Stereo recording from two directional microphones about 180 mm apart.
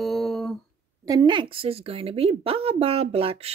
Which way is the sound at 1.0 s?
25° right (ahead or behind).